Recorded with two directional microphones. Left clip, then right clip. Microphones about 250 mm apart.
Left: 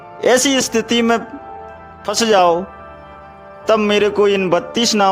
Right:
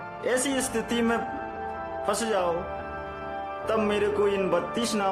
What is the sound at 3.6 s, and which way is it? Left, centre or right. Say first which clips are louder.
A man's voice: left 12 dB; left.